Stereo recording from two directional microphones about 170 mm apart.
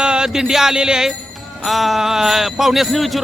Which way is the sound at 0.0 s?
5° right (ahead or behind).